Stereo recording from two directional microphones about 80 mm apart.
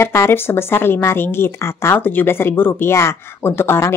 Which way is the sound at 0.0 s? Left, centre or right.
Left.